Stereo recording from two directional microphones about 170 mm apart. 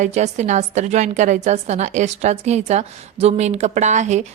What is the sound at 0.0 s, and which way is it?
A woman's voice, 40° right (ahead or behind).